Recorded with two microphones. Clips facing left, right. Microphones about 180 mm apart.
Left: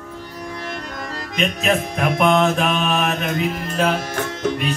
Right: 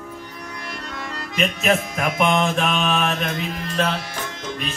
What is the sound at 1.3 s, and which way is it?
Music, centre (ahead or behind).